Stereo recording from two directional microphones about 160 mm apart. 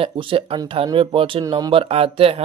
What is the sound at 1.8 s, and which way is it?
Speech, 35° right (ahead or behind).